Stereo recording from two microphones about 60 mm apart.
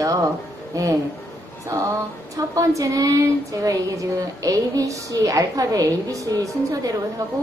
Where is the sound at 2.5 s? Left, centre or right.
Right.